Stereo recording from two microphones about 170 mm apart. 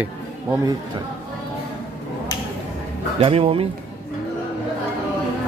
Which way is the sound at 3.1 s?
35° right (ahead or behind).